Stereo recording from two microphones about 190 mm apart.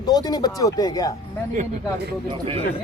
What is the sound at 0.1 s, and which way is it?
Speech, 20° left (ahead or behind).